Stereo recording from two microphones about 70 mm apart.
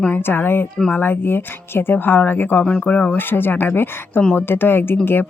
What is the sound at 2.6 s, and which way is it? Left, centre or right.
Speech, centre.